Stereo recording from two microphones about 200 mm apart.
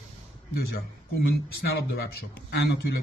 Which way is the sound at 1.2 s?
55° left (ahead or behind).